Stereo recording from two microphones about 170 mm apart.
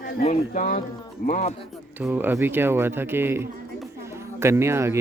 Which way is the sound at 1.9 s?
10° right (ahead or behind).